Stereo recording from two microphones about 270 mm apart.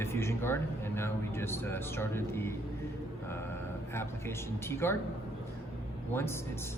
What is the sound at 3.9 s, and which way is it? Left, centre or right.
Speech, centre.